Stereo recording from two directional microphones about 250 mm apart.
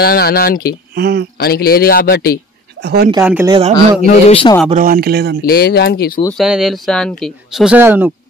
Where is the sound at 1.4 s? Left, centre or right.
Left.